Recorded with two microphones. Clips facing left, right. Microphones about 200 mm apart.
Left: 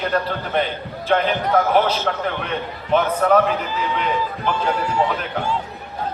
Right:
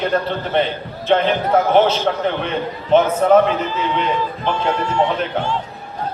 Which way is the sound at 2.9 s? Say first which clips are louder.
Right 4 dB; 25° right (ahead or behind).